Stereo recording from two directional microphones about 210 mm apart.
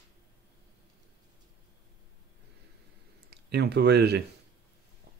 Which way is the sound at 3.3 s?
50° right (ahead or behind).